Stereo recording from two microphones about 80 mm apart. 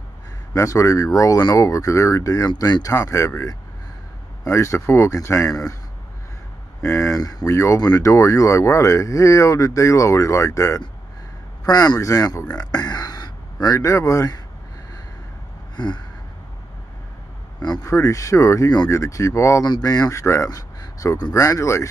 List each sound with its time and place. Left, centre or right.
0.6 s speech: left
6.8 s speech: left
11.6 s speech: left
12.7 s a sound: left
13.7 s speech: left
15.7 s gasp: left
17.6 s speech: left
17.8 s speech: left
19.6 s speech: left
20.1 s speech: left
20.4 s a sound: left
21.3 s speech: left